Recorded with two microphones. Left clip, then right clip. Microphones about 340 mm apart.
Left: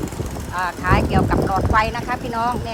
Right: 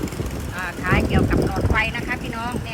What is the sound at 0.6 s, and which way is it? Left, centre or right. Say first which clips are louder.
Speech: left 3 dB; centre.